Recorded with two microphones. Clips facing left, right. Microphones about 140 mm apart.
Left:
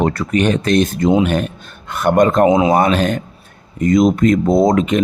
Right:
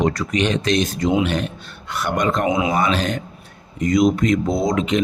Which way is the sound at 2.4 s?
35° left (ahead or behind).